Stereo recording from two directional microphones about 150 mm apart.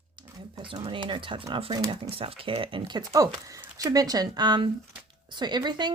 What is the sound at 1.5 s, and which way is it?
Speech, 35° right (ahead or behind).